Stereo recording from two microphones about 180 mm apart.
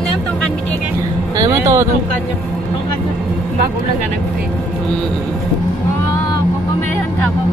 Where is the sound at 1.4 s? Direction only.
15° right (ahead or behind).